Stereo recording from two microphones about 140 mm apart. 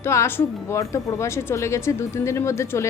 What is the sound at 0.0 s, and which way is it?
A woman's voice, 20° left (ahead or behind).